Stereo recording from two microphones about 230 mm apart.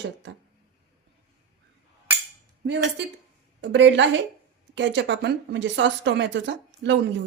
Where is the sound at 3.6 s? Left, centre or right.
Right.